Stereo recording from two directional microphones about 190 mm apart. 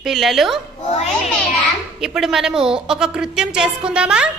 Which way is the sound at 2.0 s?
5° right (ahead or behind).